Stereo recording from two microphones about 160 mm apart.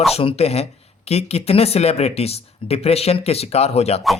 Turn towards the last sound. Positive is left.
turn(degrees=40)  # may be behind; listen again after turning